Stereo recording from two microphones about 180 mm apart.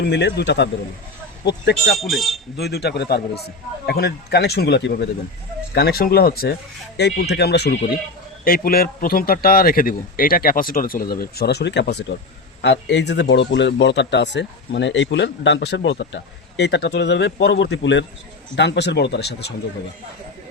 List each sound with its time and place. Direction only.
0.0 s a man's voice: 75° left (ahead or behind)
1.9 s speech: centre (ahead or behind)
2.6 s speech: 65° left (ahead or behind)
8.4 s speech: 55° left (ahead or behind)
12.6 s a man's voice: 80° left
18.5 s a man's voice: 70° left (ahead or behind)